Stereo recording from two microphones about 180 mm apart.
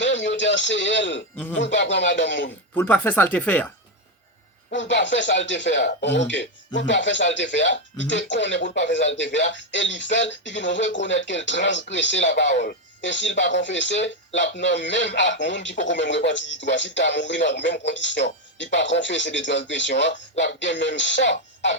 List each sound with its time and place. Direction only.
0.0 s speech: 85° left
2.7 s speech: 10° left (ahead or behind)
4.9 s speech: 85° left
5.7 s speech: 75° left (ahead or behind)